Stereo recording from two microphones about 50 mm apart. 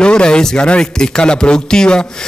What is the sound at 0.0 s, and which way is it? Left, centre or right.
A man's voice, centre.